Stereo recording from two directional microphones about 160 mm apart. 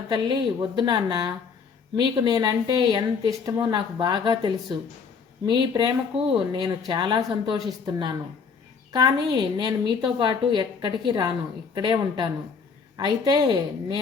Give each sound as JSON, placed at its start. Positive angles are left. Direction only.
{"t": 0.1, "sound": "speech", "side_deg": -30}